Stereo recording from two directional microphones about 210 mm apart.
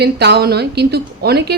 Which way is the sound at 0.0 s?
50° right (ahead or behind).